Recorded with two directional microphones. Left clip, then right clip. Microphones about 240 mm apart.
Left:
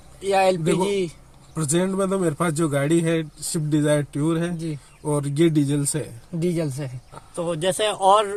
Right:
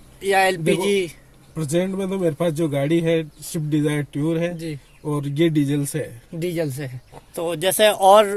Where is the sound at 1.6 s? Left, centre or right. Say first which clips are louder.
Even; centre.